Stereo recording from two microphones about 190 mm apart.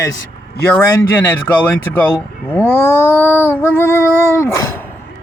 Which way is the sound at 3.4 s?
10° left (ahead or behind).